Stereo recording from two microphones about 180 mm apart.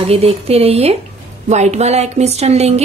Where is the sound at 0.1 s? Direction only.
35° right (ahead or behind).